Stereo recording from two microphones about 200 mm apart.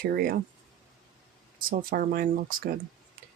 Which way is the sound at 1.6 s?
45° right (ahead or behind).